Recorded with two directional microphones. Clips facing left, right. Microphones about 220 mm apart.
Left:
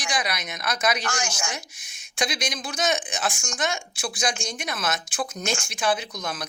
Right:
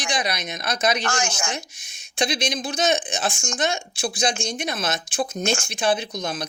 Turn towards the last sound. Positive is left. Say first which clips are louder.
# right 4 dB
turn(degrees=-25)  # may be behind; listen again after turning